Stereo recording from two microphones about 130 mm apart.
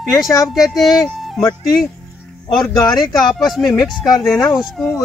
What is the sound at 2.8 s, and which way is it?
Speech, 30° left (ahead or behind).